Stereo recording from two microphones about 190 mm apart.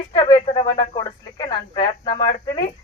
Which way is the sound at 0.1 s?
25° left (ahead or behind).